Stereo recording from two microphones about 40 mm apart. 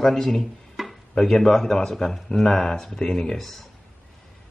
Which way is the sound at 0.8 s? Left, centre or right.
Centre.